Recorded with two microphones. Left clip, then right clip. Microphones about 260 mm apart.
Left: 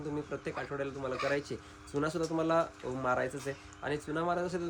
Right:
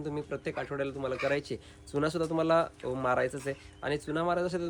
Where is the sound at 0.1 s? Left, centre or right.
Centre.